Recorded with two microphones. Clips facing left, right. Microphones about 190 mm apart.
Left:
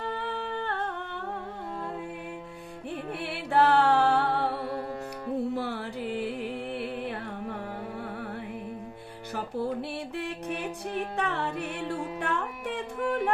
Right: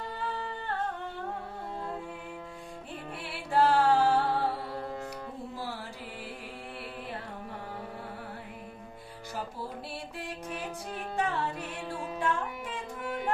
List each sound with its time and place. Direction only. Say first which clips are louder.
0.1 s humming: left 3 dB; 65° left (ahead or behind)
2.9 s music: left 7 dB; 65° left (ahead or behind)
9.3 s music: left 8 dB; 60° left (ahead or behind)